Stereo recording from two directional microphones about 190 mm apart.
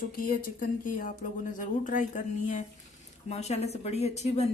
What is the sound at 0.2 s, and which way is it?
Speech, 50° left (ahead or behind).